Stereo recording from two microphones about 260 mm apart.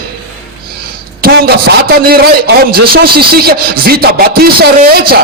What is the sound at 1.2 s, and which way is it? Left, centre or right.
A man's voice, right.